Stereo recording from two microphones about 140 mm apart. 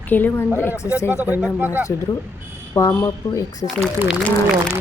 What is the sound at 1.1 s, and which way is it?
Speech, 10° right (ahead or behind).